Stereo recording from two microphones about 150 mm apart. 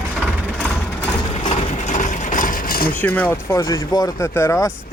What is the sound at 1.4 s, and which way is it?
Ratchet, 40° left (ahead or behind).